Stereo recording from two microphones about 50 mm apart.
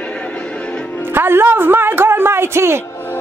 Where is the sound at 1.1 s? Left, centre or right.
Right.